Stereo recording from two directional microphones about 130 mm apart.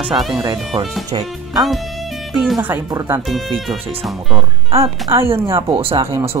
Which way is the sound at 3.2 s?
Centre (ahead or behind).